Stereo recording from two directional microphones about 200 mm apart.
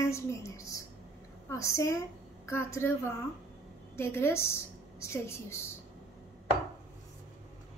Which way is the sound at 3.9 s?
10° left (ahead or behind).